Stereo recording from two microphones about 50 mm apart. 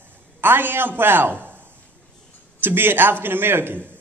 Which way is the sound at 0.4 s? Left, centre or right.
Right.